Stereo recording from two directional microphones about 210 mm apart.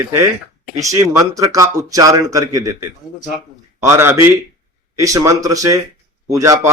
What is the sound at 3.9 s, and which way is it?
Speech, 10° right (ahead or behind).